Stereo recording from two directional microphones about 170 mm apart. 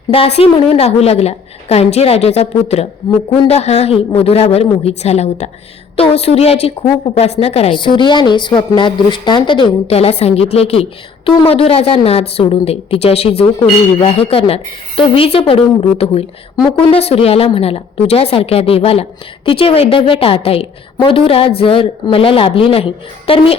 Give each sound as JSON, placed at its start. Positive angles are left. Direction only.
{"t": 0.1, "sound": "a woman's voice", "side_deg": 35}
{"t": 16.8, "sound": "a woman's voice", "side_deg": 35}